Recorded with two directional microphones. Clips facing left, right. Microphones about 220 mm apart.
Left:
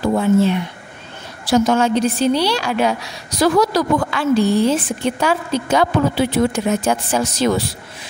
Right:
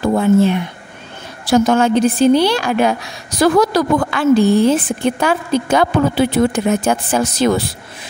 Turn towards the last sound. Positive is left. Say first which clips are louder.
# right 2 dB
turn(degrees=-55)  # may be behind; listen again after turning